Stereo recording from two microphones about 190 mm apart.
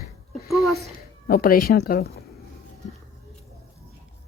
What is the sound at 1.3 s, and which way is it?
Speech, 50° left (ahead or behind).